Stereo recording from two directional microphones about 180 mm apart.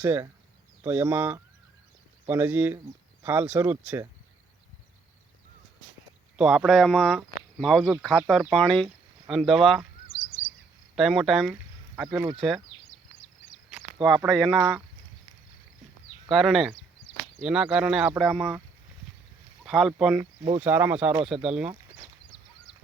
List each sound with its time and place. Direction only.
0.0 s speech: 10° right (ahead or behind)
6.3 s speech: 5° right (ahead or behind)
10.1 s bird vocalization: 90° left
10.9 s speech: centre (ahead or behind)
12.2 s speech: 25° right (ahead or behind)
13.7 s a sound: centre (ahead or behind)
14.3 s speech: centre (ahead or behind)
16.3 s speech: centre (ahead or behind)
19.6 s speech: centre (ahead or behind)